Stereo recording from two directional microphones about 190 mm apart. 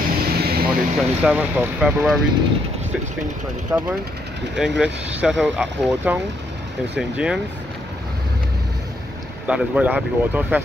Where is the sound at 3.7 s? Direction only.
15° right (ahead or behind).